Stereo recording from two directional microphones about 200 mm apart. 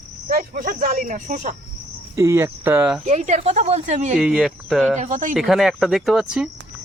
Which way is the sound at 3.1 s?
35° right (ahead or behind).